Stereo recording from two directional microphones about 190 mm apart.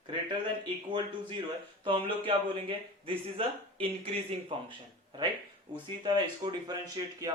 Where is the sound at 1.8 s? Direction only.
25° right (ahead or behind).